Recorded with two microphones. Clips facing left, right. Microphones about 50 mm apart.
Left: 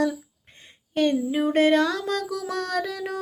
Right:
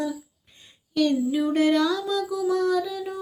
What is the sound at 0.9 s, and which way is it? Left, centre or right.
Female singing, left.